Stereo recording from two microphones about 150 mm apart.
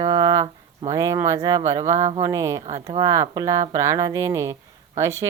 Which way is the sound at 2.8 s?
25° right (ahead or behind).